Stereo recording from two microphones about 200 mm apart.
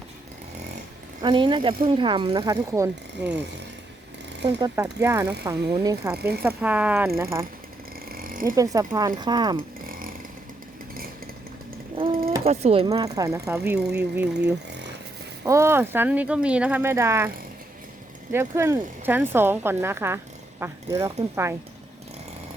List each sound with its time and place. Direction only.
1.2 s speech: 25° right (ahead or behind)
4.4 s speech: 15° right (ahead or behind)
6.1 s speech: 50° right (ahead or behind)
6.4 s speech: 10° right (ahead or behind)
8.1 s a sound: 45° right (ahead or behind)
8.5 s speech: 15° right (ahead or behind)
11.9 s a sound: 30° right (ahead or behind)
12.5 s speech: 30° right (ahead or behind)
12.9 s speech: 20° right (ahead or behind)
15.4 s speech: 15° right (ahead or behind)